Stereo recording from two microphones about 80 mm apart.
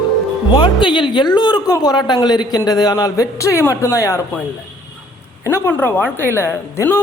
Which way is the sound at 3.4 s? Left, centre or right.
Left.